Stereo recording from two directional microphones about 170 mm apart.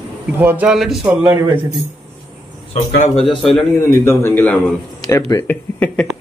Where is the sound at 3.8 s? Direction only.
15° left (ahead or behind).